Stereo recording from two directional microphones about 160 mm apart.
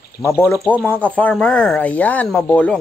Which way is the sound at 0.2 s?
15° left (ahead or behind).